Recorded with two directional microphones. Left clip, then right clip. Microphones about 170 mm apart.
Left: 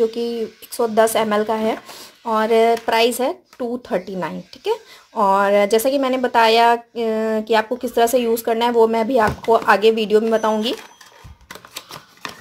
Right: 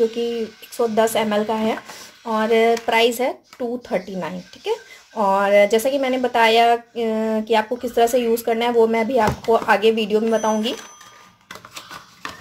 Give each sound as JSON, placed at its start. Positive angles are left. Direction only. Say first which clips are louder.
{"t": 0.1, "sound": "speech", "louder": "even", "side_deg": 30}